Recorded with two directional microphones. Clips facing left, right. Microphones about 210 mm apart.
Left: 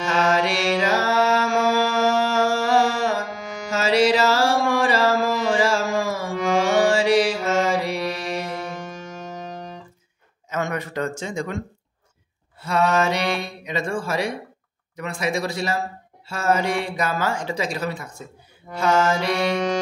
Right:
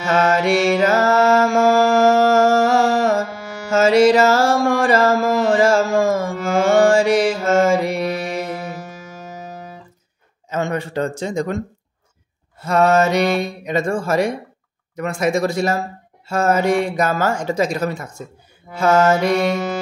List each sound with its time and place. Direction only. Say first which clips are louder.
0.2 s mantra: right 4 dB; 50° right (ahead or behind)
0.7 s music: right 5 dB; 50° right (ahead or behind)
3.7 s mantra: right 6 dB; 50° right (ahead or behind)
8.3 s music: right 3 dB; 5° right (ahead or behind)
10.5 s speech: right 4 dB; 30° right (ahead or behind)
12.6 s speech: right 5 dB; 45° right (ahead or behind)
19.5 s music: even; 5° right (ahead or behind)